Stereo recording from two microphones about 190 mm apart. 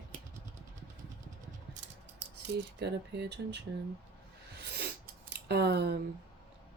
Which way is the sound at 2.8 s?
60° right (ahead or behind).